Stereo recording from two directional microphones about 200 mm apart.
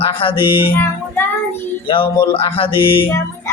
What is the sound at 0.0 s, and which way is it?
Music, 25° left (ahead or behind).